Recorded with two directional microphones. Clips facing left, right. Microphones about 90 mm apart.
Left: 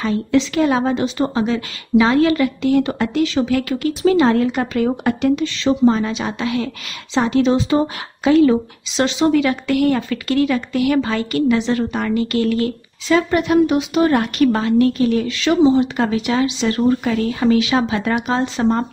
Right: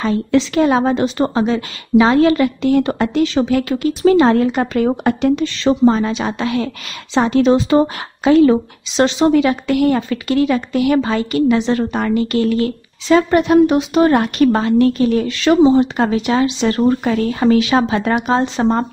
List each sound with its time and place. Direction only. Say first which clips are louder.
0.0 s speech: right 2 dB; 40° right (ahead or behind)
4.0 s a woman's voice: right 3 dB; 40° right (ahead or behind)
8.2 s speech: right 2 dB; 35° right (ahead or behind); by 11.7 s 20° right (ahead or behind)
11.7 s speech: right 2 dB; 35° right (ahead or behind)